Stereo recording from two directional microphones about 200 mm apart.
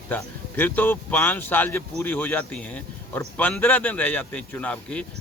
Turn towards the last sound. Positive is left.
turn(degrees=5)  # may be behind; listen again after turning